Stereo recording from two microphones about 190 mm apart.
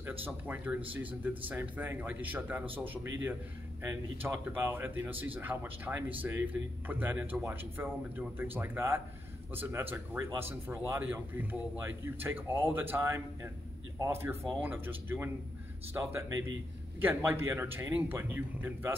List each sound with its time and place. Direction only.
0.0 s speech: 10° right (ahead or behind)